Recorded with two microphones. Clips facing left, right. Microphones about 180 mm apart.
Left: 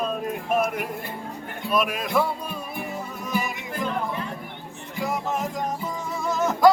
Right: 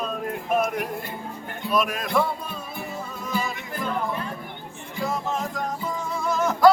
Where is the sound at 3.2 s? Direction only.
15° left (ahead or behind).